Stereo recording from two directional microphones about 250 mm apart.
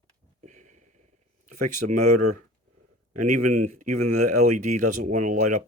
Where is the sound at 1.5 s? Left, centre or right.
Right.